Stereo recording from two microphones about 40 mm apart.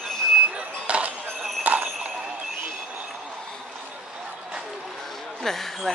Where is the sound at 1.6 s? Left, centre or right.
Right.